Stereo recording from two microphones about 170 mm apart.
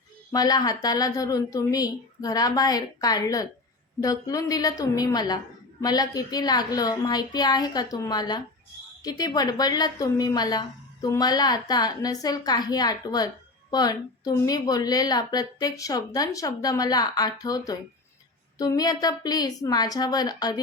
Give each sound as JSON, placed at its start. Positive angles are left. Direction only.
{"t": 0.3, "sound": "a woman's voice", "side_deg": 20}